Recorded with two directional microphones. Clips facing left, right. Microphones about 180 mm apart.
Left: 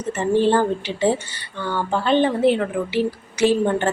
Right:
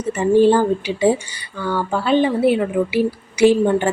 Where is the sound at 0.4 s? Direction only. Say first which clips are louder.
Right 4 dB; 10° right (ahead or behind).